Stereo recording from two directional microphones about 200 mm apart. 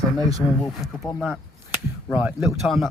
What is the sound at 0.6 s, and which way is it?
Speech, centre (ahead or behind).